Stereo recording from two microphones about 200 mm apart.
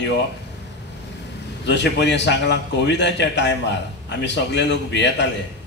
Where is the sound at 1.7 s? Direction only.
60° left (ahead or behind).